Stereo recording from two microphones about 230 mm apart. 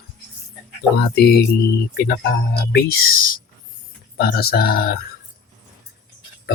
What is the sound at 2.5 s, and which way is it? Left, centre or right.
Speech, left.